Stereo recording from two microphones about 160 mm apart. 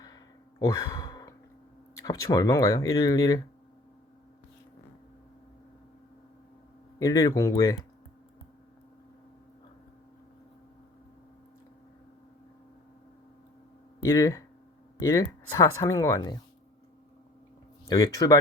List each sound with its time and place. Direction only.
0.6 s speech: 20° left (ahead or behind)
7.0 s speech: 20° left (ahead or behind)
14.0 s speech: 20° left (ahead or behind)
17.8 s speech: 20° left (ahead or behind)